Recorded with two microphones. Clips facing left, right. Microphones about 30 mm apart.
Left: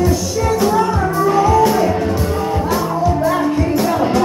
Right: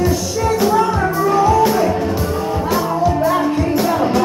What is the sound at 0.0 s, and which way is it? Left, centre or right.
Music, centre.